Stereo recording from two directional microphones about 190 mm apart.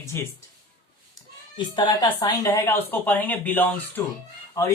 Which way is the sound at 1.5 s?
25° left (ahead or behind).